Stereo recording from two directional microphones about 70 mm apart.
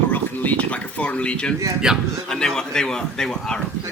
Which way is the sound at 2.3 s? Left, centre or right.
Centre.